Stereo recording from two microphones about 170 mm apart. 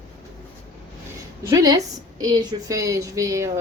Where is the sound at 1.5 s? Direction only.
20° right (ahead or behind).